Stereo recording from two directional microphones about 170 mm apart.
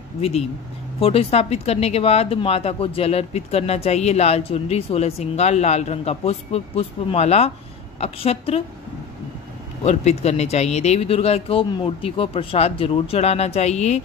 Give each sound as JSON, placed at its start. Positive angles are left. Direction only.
{"t": 0.2, "sound": "speech", "side_deg": 35}
{"t": 9.8, "sound": "speech", "side_deg": 40}